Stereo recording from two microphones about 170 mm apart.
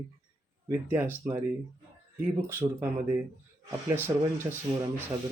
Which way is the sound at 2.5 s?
10° right (ahead or behind).